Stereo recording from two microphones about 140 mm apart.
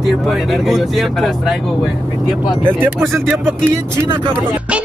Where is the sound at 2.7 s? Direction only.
15° right (ahead or behind).